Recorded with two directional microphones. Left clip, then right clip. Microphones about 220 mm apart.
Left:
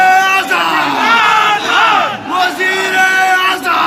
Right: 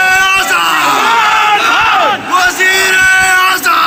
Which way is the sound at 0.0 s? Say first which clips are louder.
Even; 20° left (ahead or behind).